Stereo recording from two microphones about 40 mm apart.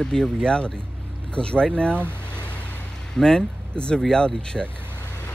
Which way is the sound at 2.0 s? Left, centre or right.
Right.